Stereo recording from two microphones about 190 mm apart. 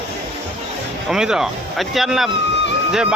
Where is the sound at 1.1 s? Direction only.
5° right (ahead or behind).